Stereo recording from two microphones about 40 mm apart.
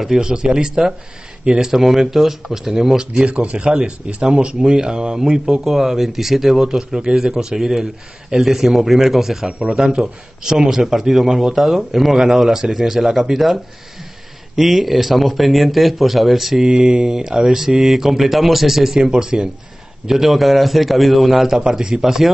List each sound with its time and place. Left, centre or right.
0.0 s speech: centre
1.7 s speech: centre
3.2 s speech: right
5.5 s speech: centre
9.5 s speech: right; by 16.6 s centre
16.6 s speech: right; by 18.9 s centre
18.9 s speech: centre
20.1 s speech: centre
21.5 s speech: centre